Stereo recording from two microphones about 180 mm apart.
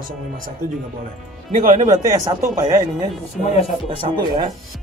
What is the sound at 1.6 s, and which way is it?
Speech, 50° right (ahead or behind).